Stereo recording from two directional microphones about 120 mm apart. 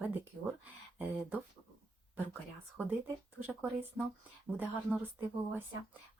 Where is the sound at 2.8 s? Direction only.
15° right (ahead or behind).